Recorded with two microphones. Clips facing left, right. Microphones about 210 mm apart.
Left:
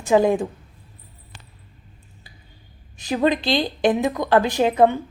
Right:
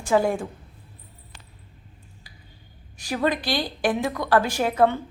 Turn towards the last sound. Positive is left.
turn(degrees=20)  # may be behind; listen again after turning